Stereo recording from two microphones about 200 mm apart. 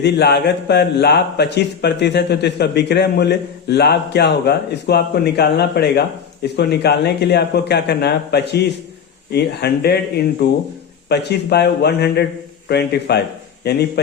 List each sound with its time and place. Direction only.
0.0 s a man's voice: 55° left (ahead or behind)